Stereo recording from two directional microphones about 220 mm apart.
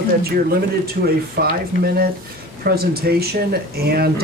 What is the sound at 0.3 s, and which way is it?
Speech, 45° right (ahead or behind).